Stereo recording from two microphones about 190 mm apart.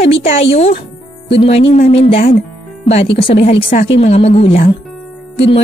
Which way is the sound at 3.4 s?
30° left (ahead or behind).